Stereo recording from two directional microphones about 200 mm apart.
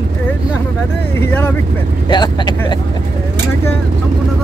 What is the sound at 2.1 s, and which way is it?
Speech, 20° left (ahead or behind).